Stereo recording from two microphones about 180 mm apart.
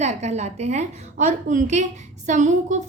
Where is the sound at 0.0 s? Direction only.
40° right (ahead or behind).